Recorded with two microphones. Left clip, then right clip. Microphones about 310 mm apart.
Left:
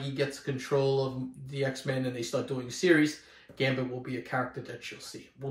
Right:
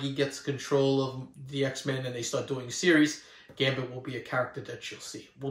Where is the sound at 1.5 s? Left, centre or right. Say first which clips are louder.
Right 1 dB; centre.